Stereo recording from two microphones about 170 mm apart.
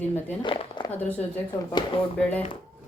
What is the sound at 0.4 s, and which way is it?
Speech, 30° left (ahead or behind).